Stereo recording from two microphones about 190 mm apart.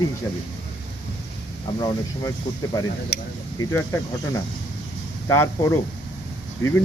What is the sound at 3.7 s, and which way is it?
Speech, 15° left (ahead or behind).